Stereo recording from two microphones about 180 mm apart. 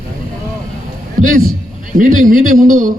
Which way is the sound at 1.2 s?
50° right (ahead or behind).